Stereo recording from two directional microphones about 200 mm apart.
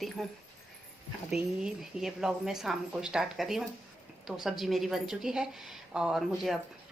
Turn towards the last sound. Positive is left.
turn(degrees=0)  # may be behind; listen again after turning